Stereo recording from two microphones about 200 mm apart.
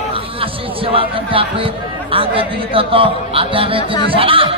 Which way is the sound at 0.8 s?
25° right (ahead or behind).